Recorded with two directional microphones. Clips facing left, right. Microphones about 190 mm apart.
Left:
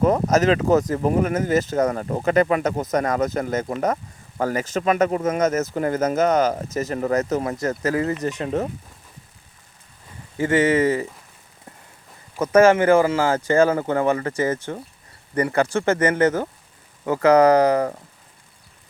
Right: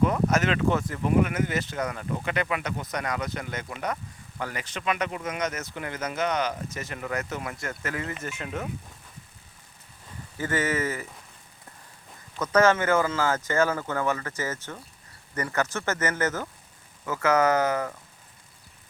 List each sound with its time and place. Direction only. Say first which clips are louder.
0.0 s speech: left 6 dB; 40° left (ahead or behind)
10.4 s speech: left 9 dB; 30° left (ahead or behind)
12.4 s speech: left 7 dB; 30° left (ahead or behind)
16.0 s speech: left 9 dB; 30° left (ahead or behind)